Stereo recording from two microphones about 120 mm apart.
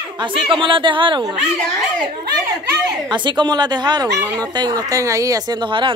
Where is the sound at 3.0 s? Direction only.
40° right (ahead or behind).